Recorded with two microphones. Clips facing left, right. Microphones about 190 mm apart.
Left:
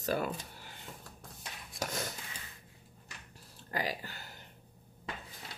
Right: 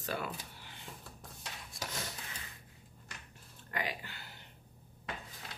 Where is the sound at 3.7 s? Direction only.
35° left (ahead or behind).